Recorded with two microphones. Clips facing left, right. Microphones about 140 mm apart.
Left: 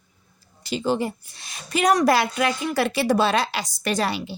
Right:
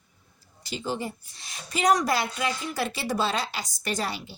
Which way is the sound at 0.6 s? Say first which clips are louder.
Left 8 dB; 75° left (ahead or behind).